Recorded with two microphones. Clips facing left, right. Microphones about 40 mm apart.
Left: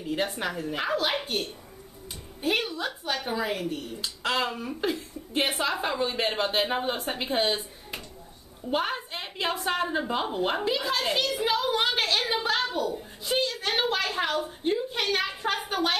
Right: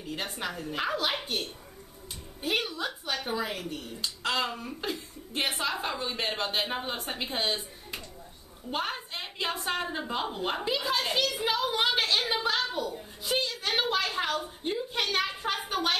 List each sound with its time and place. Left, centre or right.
0.0 s a woman's voice: centre
2.4 s a woman's voice: centre
3.4 s a woman's voice: centre
12.9 s a sound: centre
13.7 s a woman's voice: centre